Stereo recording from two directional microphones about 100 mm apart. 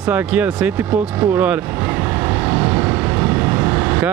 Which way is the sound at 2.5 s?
20° right (ahead or behind).